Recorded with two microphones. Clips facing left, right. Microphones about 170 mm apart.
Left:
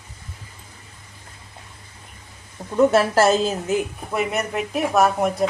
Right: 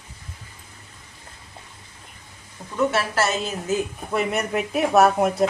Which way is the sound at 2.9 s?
35° left (ahead or behind).